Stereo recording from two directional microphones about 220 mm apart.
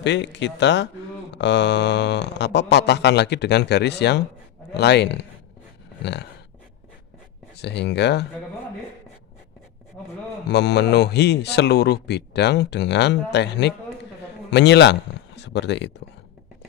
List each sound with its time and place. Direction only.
0.0 s speech: 50° left (ahead or behind)
7.5 s speech: 50° left (ahead or behind)
10.5 s speech: 50° left (ahead or behind)